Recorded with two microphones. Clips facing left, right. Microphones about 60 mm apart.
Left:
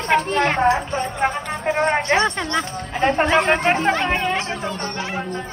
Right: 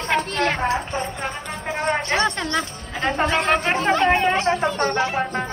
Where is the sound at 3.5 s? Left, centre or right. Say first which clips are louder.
Left 2 dB; centre.